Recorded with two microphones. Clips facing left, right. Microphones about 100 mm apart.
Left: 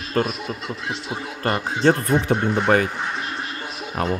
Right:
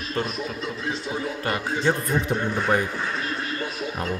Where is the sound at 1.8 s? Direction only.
65° left (ahead or behind).